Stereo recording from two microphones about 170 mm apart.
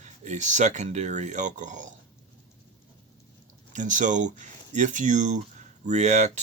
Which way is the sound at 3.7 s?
45° right (ahead or behind).